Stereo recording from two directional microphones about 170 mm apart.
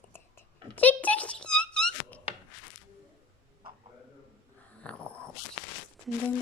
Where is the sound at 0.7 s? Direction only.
10° left (ahead or behind).